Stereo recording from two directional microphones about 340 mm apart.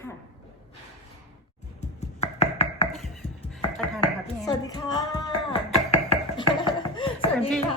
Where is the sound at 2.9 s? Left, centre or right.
Centre.